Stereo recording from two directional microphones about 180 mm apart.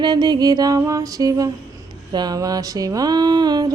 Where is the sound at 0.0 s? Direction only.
25° right (ahead or behind).